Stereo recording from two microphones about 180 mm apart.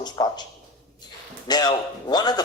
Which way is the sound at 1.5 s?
25° left (ahead or behind).